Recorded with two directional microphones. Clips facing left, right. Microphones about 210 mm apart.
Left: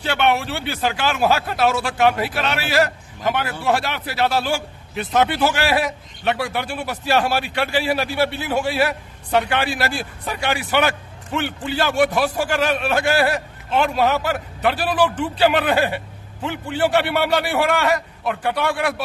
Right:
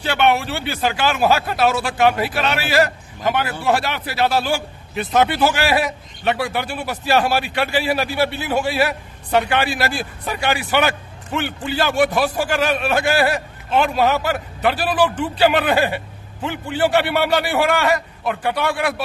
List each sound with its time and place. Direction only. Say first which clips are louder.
0.0 s speech: right 2 dB; centre (ahead or behind)